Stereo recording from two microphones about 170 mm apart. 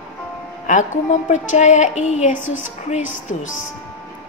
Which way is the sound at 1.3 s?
45° left (ahead or behind).